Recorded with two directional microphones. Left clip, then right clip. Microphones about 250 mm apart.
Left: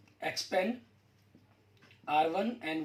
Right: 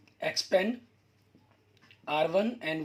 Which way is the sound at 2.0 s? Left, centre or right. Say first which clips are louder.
Right 2 dB; right.